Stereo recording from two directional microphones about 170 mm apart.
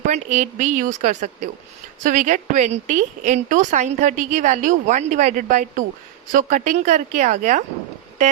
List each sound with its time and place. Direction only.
0.1 s a woman's voice: 40° right (ahead or behind)